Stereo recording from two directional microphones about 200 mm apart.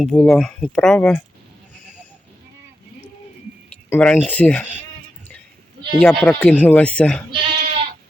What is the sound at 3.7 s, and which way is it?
Speech, 5° left (ahead or behind).